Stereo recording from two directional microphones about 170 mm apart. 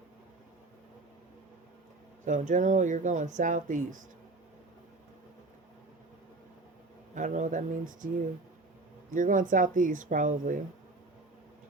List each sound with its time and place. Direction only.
2.2 s speech: 50° right (ahead or behind)
7.2 s speech: 50° right (ahead or behind)
9.1 s speech: 50° right (ahead or behind)